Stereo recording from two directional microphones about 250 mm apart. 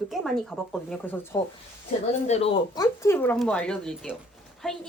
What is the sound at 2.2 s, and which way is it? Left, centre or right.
Speech, left.